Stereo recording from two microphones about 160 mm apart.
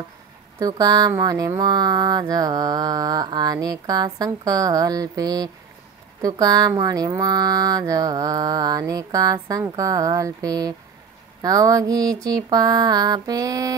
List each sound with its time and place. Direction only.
0.6 s speech: 25° right (ahead or behind)